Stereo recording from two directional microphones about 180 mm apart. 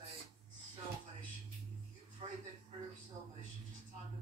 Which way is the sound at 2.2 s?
35° right (ahead or behind).